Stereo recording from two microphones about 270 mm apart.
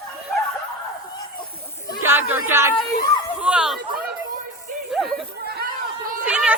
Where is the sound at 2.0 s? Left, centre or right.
Centre.